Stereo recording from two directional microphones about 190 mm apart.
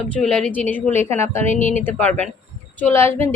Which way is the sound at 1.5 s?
40° left (ahead or behind).